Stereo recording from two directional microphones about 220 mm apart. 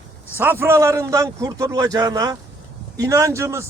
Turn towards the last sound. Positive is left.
turn(degrees=-10)  # may be behind; listen again after turning